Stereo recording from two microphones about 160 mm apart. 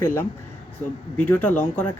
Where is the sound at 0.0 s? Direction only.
15° left (ahead or behind).